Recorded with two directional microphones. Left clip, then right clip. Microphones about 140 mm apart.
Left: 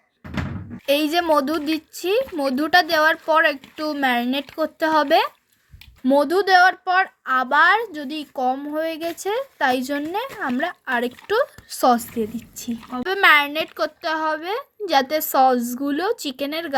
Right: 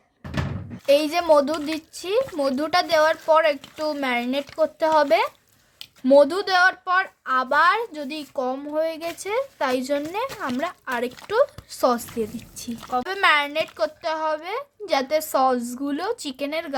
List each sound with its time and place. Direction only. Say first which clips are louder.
0.9 s speech: right 1 dB; 10° left (ahead or behind)
13.2 s a woman's voice: left 5 dB; 25° left (ahead or behind)